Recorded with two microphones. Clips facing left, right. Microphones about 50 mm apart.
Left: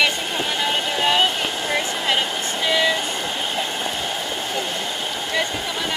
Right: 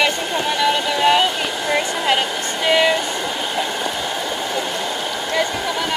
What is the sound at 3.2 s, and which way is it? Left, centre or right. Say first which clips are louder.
Train: right 2 dB; centre.